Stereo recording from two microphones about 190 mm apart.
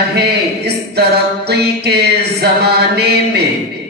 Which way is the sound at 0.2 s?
60° right (ahead or behind).